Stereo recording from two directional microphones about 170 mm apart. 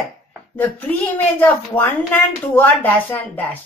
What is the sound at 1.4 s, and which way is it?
A woman's voice, 10° left (ahead or behind).